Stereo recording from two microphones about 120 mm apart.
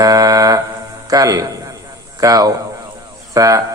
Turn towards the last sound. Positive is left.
turn(degrees=-30)  # may be behind; listen again after turning